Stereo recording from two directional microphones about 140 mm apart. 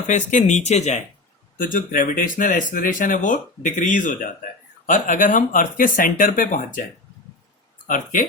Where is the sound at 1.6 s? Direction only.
75° left (ahead or behind).